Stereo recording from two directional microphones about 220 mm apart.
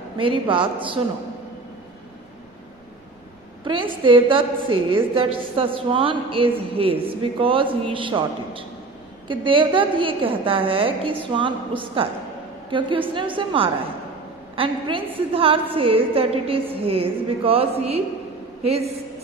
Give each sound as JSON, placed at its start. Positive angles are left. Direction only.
{"t": 0.2, "sound": "a woman's voice", "side_deg": -25}
{"t": 3.6, "sound": "a woman's voice", "side_deg": -20}